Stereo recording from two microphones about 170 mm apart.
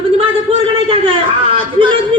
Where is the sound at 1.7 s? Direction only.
30° right (ahead or behind).